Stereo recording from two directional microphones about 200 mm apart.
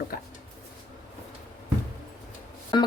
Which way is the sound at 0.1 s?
45° left (ahead or behind).